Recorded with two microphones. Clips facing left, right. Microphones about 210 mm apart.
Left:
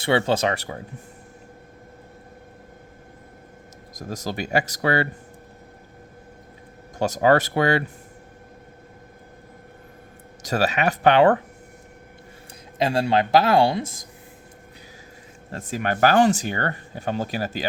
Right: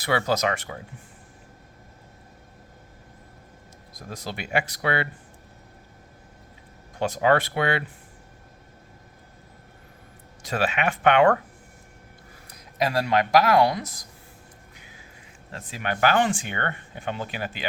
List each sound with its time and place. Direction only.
0.0 s speech: 25° left (ahead or behind)
3.9 s speech: 45° left (ahead or behind)
7.0 s speech: 40° left (ahead or behind)
10.4 s speech: 40° left (ahead or behind)
12.8 s speech: 30° left (ahead or behind)
15.5 s speech: 45° left (ahead or behind)